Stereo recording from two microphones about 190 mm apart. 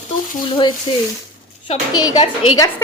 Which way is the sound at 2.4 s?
90° left.